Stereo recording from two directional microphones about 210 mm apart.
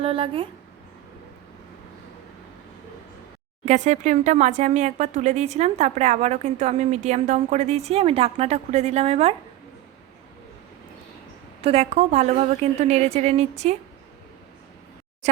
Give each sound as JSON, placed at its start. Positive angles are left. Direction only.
{"t": 0.0, "sound": "speech", "side_deg": -25}
{"t": 3.7, "sound": "speech", "side_deg": -35}
{"t": 11.6, "sound": "speech", "side_deg": -30}